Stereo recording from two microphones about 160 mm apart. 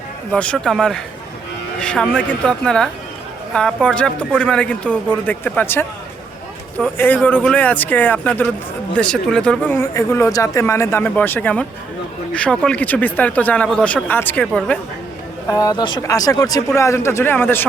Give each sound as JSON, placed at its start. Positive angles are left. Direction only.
{"t": 0.3, "sound": "speech", "side_deg": 5}
{"t": 9.8, "sound": "speech", "side_deg": 15}
{"t": 15.4, "sound": "speech", "side_deg": 25}